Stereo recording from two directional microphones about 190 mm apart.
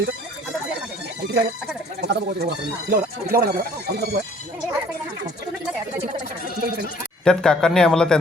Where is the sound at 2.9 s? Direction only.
50° right (ahead or behind).